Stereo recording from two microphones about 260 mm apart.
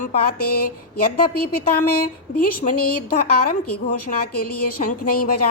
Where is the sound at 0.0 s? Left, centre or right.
Left.